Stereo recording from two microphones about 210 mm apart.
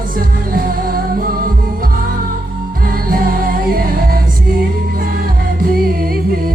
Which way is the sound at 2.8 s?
45° right (ahead or behind).